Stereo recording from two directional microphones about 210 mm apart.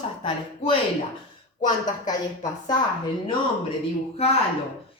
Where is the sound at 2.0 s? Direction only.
20° left (ahead or behind).